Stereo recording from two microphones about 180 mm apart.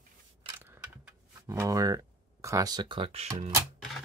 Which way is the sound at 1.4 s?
15° right (ahead or behind).